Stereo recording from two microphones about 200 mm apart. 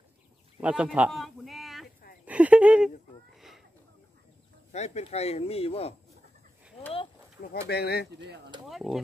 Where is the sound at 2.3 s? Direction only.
5° right (ahead or behind).